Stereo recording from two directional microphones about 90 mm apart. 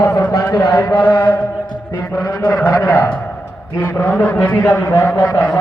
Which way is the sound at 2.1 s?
40° left (ahead or behind).